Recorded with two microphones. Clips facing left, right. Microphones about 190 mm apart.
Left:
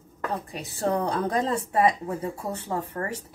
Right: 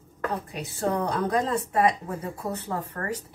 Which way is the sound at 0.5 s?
30° left (ahead or behind).